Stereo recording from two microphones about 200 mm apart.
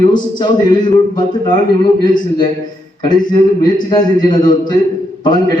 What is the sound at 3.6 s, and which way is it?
A man's voice, 20° left (ahead or behind).